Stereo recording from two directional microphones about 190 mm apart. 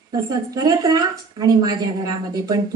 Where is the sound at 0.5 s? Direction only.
20° right (ahead or behind).